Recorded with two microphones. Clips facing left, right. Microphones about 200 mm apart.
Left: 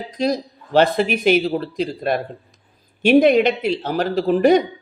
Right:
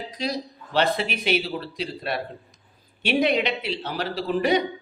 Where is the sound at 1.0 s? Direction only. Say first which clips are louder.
Left 8 dB; 50° left (ahead or behind).